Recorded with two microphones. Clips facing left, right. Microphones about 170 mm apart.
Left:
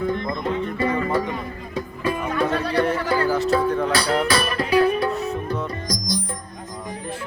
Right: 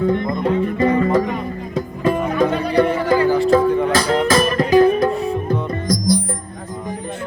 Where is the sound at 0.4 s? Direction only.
35° right (ahead or behind).